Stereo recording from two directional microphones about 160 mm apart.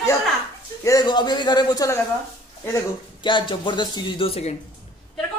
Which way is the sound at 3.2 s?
30° left (ahead or behind).